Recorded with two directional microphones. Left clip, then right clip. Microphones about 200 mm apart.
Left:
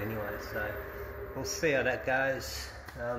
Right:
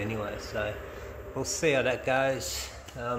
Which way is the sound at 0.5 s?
55° right (ahead or behind).